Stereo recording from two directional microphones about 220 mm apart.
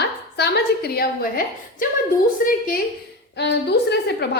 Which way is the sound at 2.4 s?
40° left (ahead or behind).